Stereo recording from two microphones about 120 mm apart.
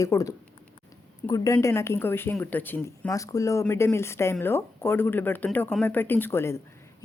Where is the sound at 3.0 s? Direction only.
25° left (ahead or behind).